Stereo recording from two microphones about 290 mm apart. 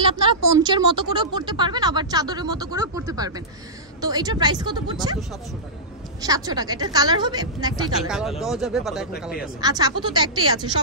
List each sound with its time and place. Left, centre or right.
0.2 s speech: centre
1.1 s a sound: centre
4.0 s a woman's voice: centre
6.2 s a woman's voice: centre
8.1 s speech: centre
9.6 s a woman's voice: centre